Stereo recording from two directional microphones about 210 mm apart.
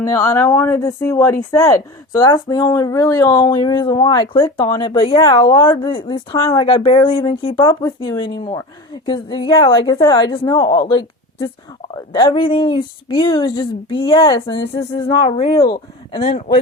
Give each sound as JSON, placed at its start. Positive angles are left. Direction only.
{"t": 0.0, "sound": "speech", "side_deg": 15}